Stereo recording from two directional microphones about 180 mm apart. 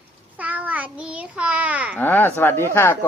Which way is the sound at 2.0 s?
10° left (ahead or behind).